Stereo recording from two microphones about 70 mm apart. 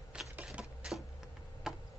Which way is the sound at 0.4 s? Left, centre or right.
Centre.